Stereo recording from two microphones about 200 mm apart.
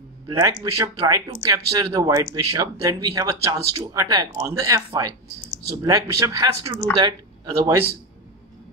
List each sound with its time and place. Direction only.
0.3 s speech: 15° right (ahead or behind)